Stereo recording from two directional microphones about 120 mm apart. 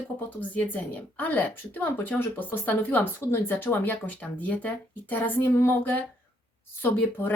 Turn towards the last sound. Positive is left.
turn(degrees=20)  # may be behind; listen again after turning